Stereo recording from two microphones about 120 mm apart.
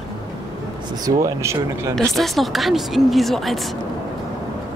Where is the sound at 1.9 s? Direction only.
5° left (ahead or behind).